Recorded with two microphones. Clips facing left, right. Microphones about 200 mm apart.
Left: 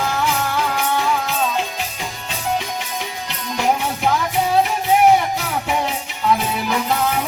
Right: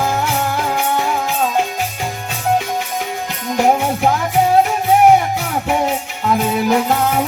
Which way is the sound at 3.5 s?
50° right (ahead or behind).